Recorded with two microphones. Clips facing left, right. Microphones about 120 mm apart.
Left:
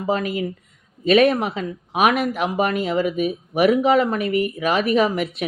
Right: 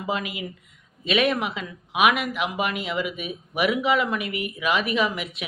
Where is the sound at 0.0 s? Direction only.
40° left (ahead or behind).